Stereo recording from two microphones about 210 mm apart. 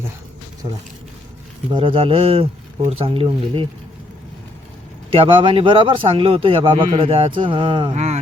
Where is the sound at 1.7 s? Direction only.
25° right (ahead or behind).